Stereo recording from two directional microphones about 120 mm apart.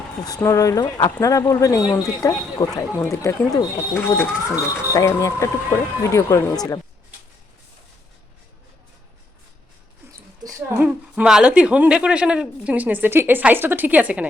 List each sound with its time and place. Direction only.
0.3 s speech: 25° left (ahead or behind)
4.5 s speech: 25° left (ahead or behind)
10.8 s speech: 10° right (ahead or behind)